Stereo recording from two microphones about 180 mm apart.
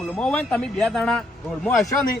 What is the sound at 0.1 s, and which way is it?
Speech, 5° left (ahead or behind).